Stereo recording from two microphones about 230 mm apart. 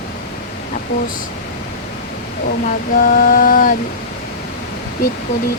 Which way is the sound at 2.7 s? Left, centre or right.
Left.